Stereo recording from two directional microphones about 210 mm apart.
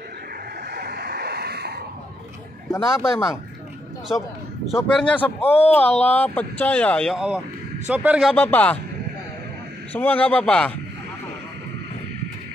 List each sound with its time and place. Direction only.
0.7 s a sound: 50° right (ahead or behind)
2.7 s speech: 15° left (ahead or behind)
4.6 s a man's voice: centre (ahead or behind)
5.4 s a man's voice: 30° left (ahead or behind)
5.7 s a man's voice: 5° left (ahead or behind)
8.4 s speech: 5° left (ahead or behind)
9.9 s speech: 5° left (ahead or behind)